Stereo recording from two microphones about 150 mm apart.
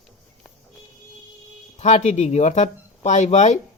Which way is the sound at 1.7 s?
50° left (ahead or behind).